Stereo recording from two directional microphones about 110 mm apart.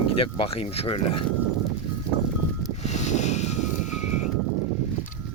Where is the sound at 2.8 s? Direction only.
90° left.